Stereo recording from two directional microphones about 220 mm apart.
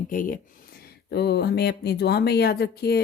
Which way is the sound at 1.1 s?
50° left (ahead or behind).